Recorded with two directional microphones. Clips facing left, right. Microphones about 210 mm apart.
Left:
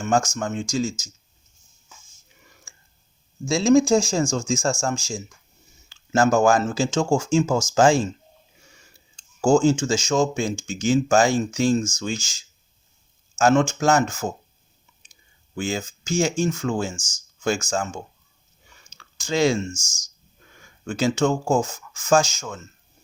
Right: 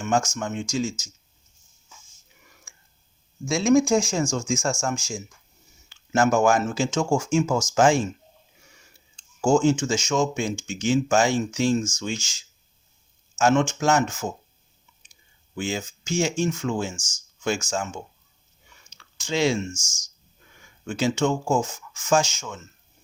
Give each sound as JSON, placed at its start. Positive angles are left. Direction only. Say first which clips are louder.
{"t": 0.0, "sound": "speech", "louder": "left 2 dB", "side_deg": 35}
{"t": 3.4, "sound": "speech", "louder": "left 2 dB", "side_deg": 30}
{"t": 9.1, "sound": "speech", "louder": "left 2 dB", "side_deg": 35}
{"t": 15.5, "sound": "speech", "louder": "left 2 dB", "side_deg": 40}
{"t": 18.9, "sound": "a sound", "louder": "left 2 dB", "side_deg": 40}
{"t": 20.6, "sound": "speech", "louder": "left 2 dB", "side_deg": 40}